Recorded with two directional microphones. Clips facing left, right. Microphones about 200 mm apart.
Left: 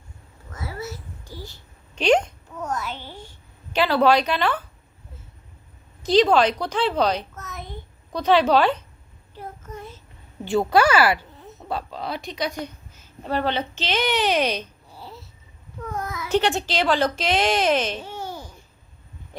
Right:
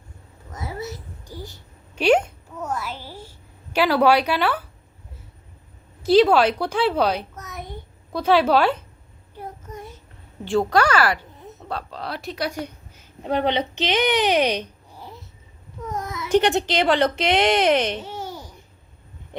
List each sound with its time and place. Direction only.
0.5 s babbling: 20° right (ahead or behind)
2.0 s a sound: 10° right (ahead or behind)
6.0 s a child's voice: 5° right (ahead or behind)
9.4 s child singing: 15° right (ahead or behind)
10.4 s a woman's voice: centre (ahead or behind); by 15.2 s 15° right (ahead or behind)
16.5 s a woman's voice: 60° right (ahead or behind)
19.3 s stomach rumble: 25° right (ahead or behind)